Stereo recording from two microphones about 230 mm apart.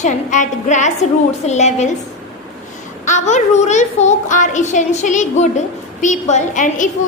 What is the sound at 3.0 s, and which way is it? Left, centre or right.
A woman's voice, left.